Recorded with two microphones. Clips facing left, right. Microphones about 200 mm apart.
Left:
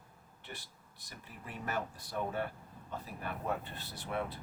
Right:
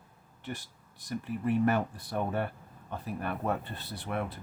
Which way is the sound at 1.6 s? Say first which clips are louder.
Right 10 dB; 60° right (ahead or behind).